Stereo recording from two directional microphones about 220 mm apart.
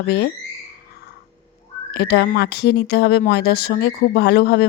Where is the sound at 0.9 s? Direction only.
45° left (ahead or behind).